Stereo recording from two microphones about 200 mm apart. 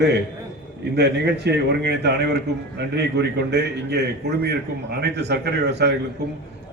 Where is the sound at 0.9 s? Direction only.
55° right (ahead or behind).